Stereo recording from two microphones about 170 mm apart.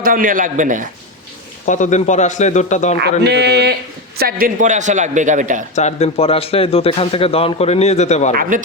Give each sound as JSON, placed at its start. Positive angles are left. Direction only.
{"t": 0.0, "sound": "a man's voice", "side_deg": -55}
{"t": 1.6, "sound": "a man's voice", "side_deg": 50}
{"t": 3.0, "sound": "speech", "side_deg": -75}
{"t": 4.2, "sound": "a man's voice", "side_deg": -60}
{"t": 5.7, "sound": "speech", "side_deg": 40}
{"t": 8.4, "sound": "a man's voice", "side_deg": -50}